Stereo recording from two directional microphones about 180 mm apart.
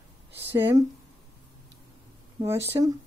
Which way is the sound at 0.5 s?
10° right (ahead or behind).